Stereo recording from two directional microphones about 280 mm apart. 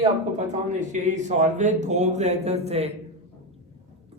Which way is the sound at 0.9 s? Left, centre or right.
Right.